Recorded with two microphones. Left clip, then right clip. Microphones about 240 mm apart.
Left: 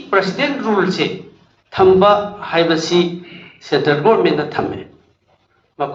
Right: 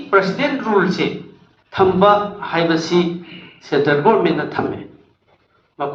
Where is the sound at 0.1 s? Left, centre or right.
Left.